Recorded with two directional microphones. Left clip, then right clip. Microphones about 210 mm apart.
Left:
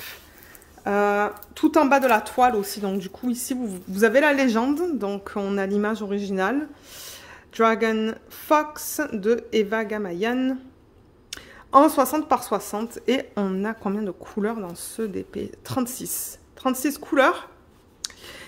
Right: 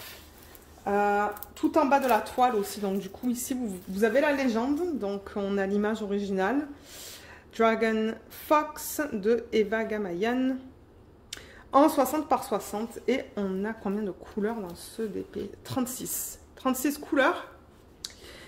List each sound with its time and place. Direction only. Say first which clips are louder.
0.8 s speech: left 4 dB; 50° left (ahead or behind); by 3.7 s 25° left (ahead or behind)
3.9 s speech: left 6 dB; 35° left (ahead or behind)
18.0 s a sound: left 6 dB; 35° left (ahead or behind)